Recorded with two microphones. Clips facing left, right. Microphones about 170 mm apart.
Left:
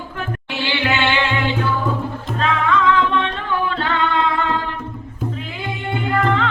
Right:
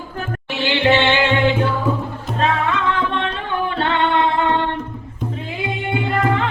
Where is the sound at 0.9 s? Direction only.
25° right (ahead or behind).